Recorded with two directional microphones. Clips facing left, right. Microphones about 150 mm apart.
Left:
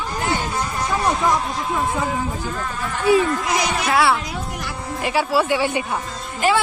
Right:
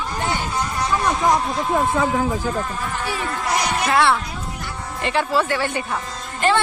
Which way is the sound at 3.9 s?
Centre (ahead or behind).